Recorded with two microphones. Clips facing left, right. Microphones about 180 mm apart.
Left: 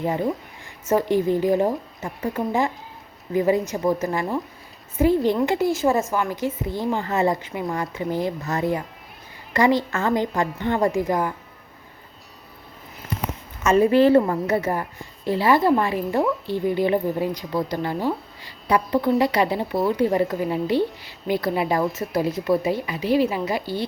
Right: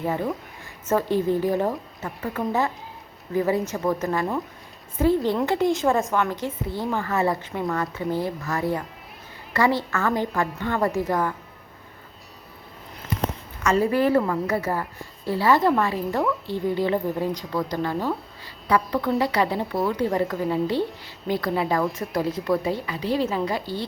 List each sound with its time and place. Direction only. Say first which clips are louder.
0.0 s a woman's voice: left 2 dB; 15° left (ahead or behind)
13.6 s a woman's voice: left 5 dB; 20° left (ahead or behind)